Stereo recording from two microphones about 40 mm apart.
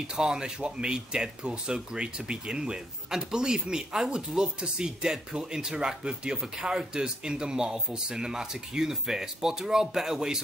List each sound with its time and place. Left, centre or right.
0.1 s speech: centre